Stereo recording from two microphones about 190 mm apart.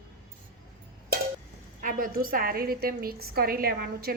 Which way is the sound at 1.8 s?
45° right (ahead or behind).